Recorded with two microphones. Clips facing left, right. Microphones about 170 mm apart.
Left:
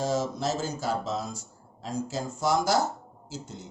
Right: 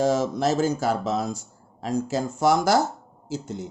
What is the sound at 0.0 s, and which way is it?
Speech, 65° right (ahead or behind).